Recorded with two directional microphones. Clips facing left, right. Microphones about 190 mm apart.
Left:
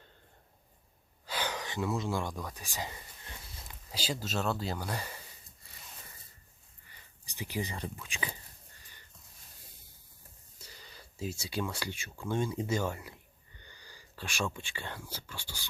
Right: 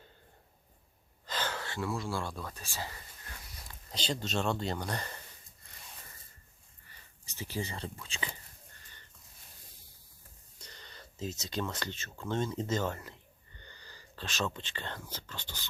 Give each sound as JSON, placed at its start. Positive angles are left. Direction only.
{"t": 1.2, "sound": "a sound", "side_deg": 10}
{"t": 3.9, "sound": "speech", "side_deg": 5}
{"t": 6.8, "sound": "speech", "side_deg": 15}
{"t": 10.6, "sound": "speech", "side_deg": 5}